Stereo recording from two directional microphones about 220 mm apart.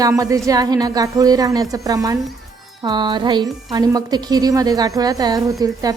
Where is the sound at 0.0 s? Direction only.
15° right (ahead or behind).